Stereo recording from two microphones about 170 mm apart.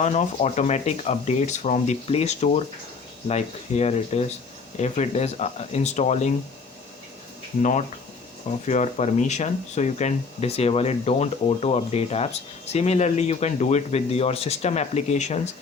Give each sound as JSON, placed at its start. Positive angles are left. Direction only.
{"t": 0.0, "sound": "speech", "side_deg": 45}
{"t": 7.6, "sound": "speech", "side_deg": 45}